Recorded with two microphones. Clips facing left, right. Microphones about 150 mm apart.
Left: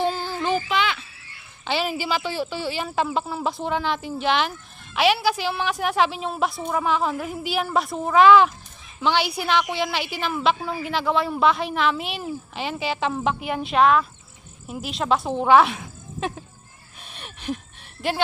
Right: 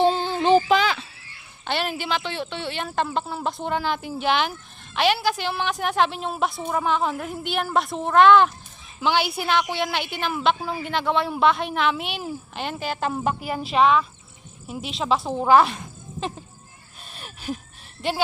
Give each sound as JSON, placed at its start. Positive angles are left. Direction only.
{"t": 0.0, "sound": "child singing", "side_deg": -25}
{"t": 0.7, "sound": "speech", "side_deg": -40}
{"t": 1.6, "sound": "a woman's voice", "side_deg": 0}
{"t": 17.2, "sound": "a sound", "side_deg": 0}